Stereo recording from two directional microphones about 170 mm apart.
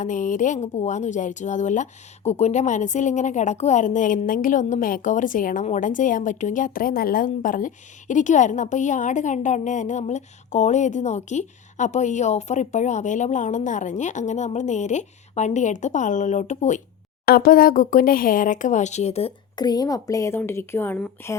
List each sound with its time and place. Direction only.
0.0 s speech: 50° left (ahead or behind)
17.2 s speech: 60° left (ahead or behind); by 19.3 s 40° left (ahead or behind)
19.5 s a woman's voice: 25° left (ahead or behind)